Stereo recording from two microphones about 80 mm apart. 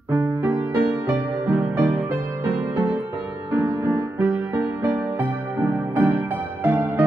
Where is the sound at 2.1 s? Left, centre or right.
Right.